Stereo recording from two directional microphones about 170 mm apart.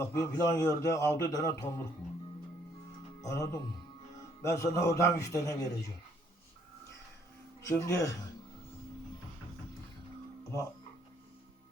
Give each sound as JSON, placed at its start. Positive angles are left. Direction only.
{"t": 0.0, "sound": "a man's voice", "side_deg": 15}
{"t": 3.2, "sound": "a man's voice", "side_deg": 20}
{"t": 7.6, "sound": "a man's voice", "side_deg": 20}